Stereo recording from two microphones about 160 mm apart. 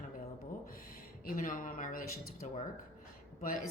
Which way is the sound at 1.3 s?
55° left (ahead or behind).